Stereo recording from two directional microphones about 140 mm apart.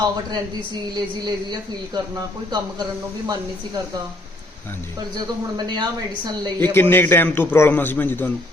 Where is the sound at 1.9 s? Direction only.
30° right (ahead or behind).